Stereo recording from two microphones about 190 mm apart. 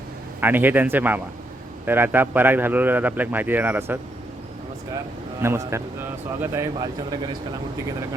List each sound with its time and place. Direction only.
0.3 s a man's voice: 10° right (ahead or behind)
5.4 s a man's voice: 15° right (ahead or behind)